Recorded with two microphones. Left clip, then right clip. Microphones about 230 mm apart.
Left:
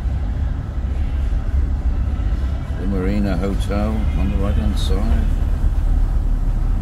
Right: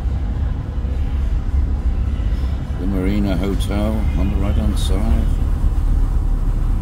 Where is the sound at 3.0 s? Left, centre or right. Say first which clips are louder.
Right 1 dB; centre.